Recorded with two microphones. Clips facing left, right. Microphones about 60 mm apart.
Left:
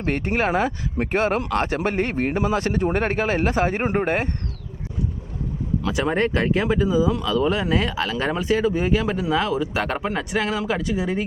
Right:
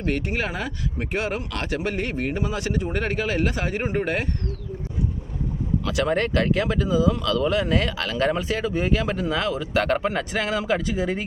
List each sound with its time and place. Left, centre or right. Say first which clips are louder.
0.0 s speech: left 3 dB; left
5.9 s speech: left 1 dB; left
7.1 s speech: left 1 dB; centre